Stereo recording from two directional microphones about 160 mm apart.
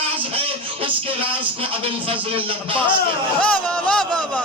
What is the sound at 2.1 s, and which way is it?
Speech, 35° right (ahead or behind).